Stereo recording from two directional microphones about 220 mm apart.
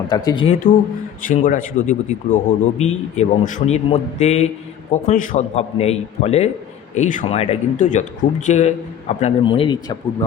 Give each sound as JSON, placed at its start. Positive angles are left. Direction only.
{"t": 0.1, "sound": "speech", "side_deg": 20}
{"t": 1.3, "sound": "a man's voice", "side_deg": 35}